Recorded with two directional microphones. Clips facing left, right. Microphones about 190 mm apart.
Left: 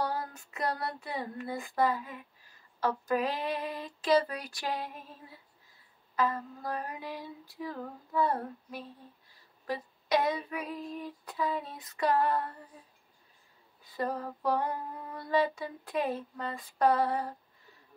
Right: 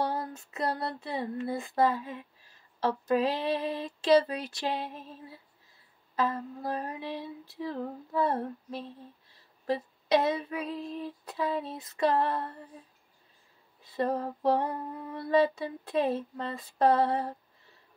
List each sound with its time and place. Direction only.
0.0 s female singing: 25° right (ahead or behind)
6.1 s female singing: 30° right (ahead or behind)
13.9 s female singing: 25° right (ahead or behind)